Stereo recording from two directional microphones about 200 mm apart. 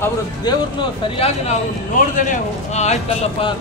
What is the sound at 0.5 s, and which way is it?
Speech, 20° left (ahead or behind).